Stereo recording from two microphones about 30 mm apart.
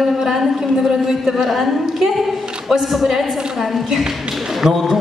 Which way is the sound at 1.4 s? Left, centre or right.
Centre.